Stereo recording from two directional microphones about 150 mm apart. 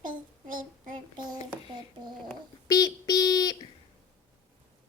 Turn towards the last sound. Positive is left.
turn(degrees=25)  # may be behind; listen again after turning